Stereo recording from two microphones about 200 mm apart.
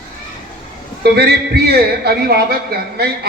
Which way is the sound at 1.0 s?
55° right (ahead or behind).